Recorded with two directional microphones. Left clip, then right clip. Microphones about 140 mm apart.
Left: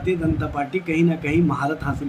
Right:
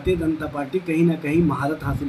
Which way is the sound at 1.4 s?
15° left (ahead or behind).